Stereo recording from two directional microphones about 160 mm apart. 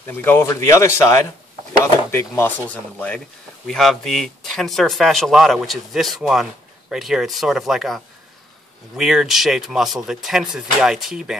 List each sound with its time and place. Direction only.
0.1 s speech: 15° left (ahead or behind); by 11.3 s 5° right (ahead or behind)